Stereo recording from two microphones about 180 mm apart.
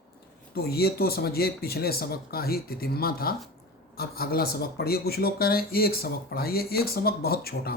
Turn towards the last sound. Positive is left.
turn(degrees=60)  # may be behind; listen again after turning